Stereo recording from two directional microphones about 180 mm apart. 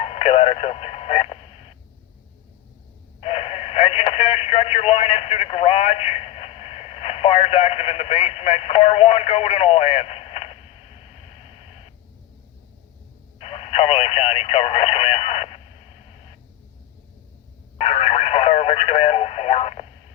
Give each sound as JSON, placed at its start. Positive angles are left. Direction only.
{"t": 0.0, "sound": "radio", "side_deg": 35}
{"t": 3.2, "sound": "radio", "side_deg": 35}
{"t": 13.4, "sound": "a sound", "side_deg": 35}
{"t": 17.7, "sound": "radio", "side_deg": 35}